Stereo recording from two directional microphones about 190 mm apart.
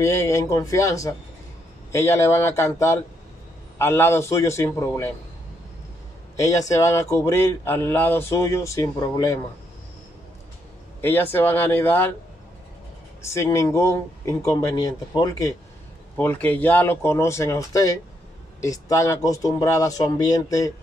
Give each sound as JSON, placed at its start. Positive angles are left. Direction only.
{"t": 0.0, "sound": "speech", "side_deg": 15}
{"t": 6.3, "sound": "speech", "side_deg": 15}
{"t": 11.0, "sound": "speech", "side_deg": 10}
{"t": 13.2, "sound": "speech", "side_deg": 15}